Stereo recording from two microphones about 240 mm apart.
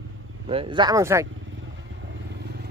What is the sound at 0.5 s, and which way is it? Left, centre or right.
Speech, right.